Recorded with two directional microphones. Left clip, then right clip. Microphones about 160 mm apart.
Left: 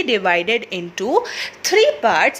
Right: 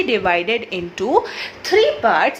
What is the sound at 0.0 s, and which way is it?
A woman's voice, 30° left (ahead or behind).